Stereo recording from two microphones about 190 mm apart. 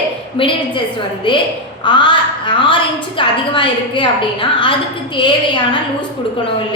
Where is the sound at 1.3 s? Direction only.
25° left (ahead or behind).